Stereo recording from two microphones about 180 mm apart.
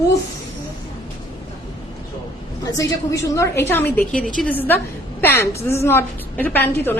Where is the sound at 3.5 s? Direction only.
10° left (ahead or behind).